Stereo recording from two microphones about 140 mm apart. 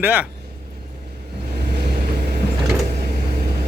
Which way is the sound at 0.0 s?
10° right (ahead or behind).